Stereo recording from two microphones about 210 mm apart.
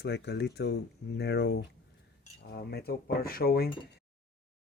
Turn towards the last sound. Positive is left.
turn(degrees=45)  # may be behind; listen again after turning